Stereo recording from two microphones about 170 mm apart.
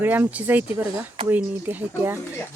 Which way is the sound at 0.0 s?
10° right (ahead or behind).